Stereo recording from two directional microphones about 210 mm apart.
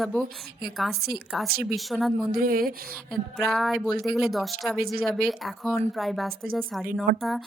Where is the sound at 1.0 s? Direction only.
50° right (ahead or behind).